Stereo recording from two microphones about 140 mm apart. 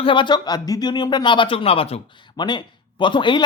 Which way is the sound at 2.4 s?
35° left (ahead or behind).